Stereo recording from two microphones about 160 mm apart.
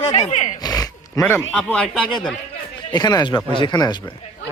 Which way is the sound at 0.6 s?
25° left (ahead or behind).